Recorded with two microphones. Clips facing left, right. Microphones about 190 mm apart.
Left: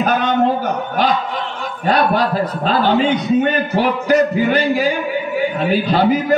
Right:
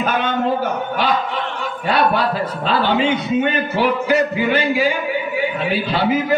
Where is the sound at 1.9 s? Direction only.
40° left (ahead or behind).